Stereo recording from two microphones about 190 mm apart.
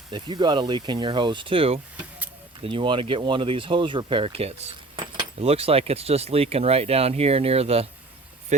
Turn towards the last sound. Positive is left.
turn(degrees=-30)  # may be behind; listen again after turning